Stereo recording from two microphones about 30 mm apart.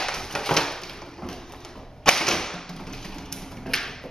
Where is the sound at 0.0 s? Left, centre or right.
Centre.